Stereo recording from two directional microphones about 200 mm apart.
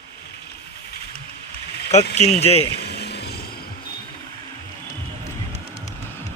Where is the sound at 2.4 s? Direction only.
30° left (ahead or behind).